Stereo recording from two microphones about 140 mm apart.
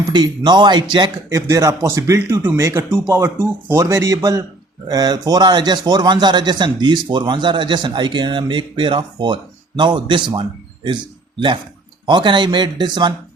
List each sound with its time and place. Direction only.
0.0 s a man's voice: 30° right (ahead or behind)